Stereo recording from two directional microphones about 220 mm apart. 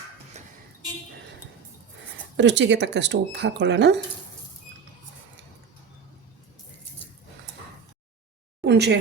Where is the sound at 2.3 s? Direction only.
55° right (ahead or behind).